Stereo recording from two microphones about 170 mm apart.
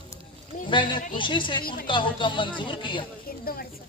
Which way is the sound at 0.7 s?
30° left (ahead or behind).